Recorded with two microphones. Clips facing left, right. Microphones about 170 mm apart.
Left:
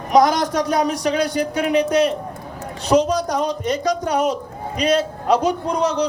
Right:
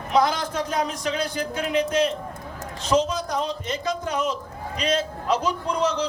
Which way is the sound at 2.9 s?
60° left (ahead or behind).